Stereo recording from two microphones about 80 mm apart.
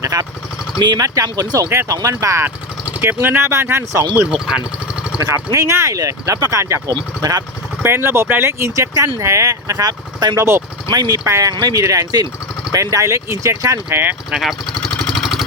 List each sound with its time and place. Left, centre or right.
0.0 s vehicle: right
0.8 s speech: right
3.0 s speech: right
4.3 s speech: centre
5.3 s speech: right
7.2 s speech: right
7.8 s speech: right
10.8 s speech: right
11.3 s speech: right
13.9 s speech: right
14.3 s speech: centre
14.9 s vehicle: centre